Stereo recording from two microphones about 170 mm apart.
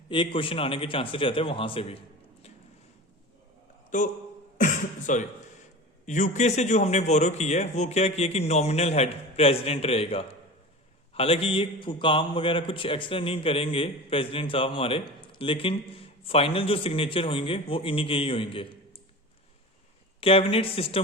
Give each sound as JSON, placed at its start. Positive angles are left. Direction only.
{"t": 0.1, "sound": "a man's voice", "side_deg": 30}
{"t": 3.9, "sound": "a man's voice", "side_deg": 50}
{"t": 20.2, "sound": "a man's voice", "side_deg": 35}